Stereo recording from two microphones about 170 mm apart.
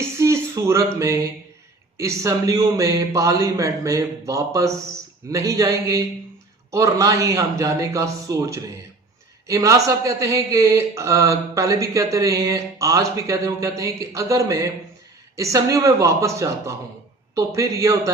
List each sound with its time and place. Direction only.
0.2 s speech: 15° right (ahead or behind)